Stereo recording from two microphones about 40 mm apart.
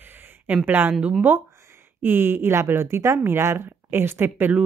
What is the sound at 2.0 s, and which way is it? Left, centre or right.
Speech, right.